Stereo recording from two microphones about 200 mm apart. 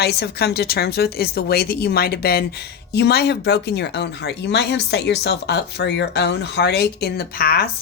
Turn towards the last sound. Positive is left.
turn(degrees=50)  # may be behind; listen again after turning